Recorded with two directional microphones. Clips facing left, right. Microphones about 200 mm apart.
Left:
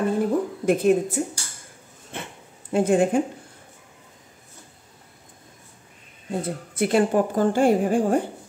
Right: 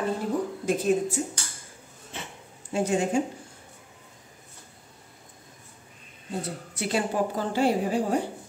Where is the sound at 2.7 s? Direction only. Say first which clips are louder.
Left 6 dB; 55° left (ahead or behind).